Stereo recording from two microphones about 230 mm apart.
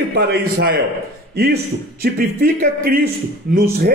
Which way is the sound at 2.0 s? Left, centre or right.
Right.